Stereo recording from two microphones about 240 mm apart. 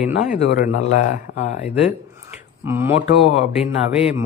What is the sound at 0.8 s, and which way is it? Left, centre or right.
Speech, left.